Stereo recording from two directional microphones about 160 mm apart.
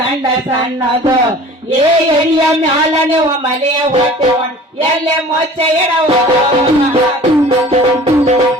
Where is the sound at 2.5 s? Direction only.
40° right (ahead or behind).